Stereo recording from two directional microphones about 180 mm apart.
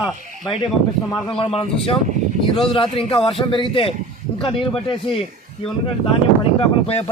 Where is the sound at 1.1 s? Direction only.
30° left (ahead or behind).